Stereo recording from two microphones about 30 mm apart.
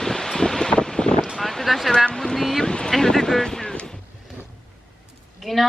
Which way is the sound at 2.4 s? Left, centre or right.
Centre.